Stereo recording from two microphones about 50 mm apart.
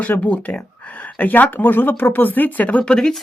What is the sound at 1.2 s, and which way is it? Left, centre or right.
Speech, left.